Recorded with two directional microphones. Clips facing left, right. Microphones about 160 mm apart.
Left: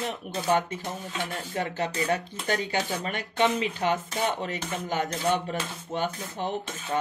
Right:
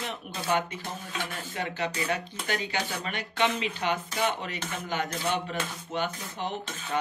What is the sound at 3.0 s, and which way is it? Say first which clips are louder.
Speech: left 2 dB; 40° left (ahead or behind).